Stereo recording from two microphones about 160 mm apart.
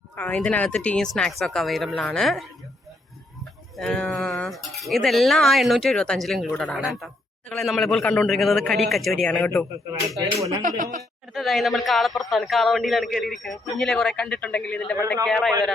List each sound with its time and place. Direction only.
0.2 s a man's voice: 5° left (ahead or behind)
3.8 s a man's voice: 5° left (ahead or behind)
10.6 s speech: 55° right (ahead or behind)
11.3 s a man's voice: centre (ahead or behind)